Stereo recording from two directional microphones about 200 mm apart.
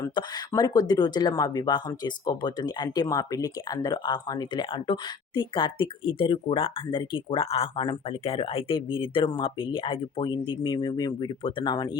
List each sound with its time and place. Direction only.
0.0 s speech: 20° left (ahead or behind)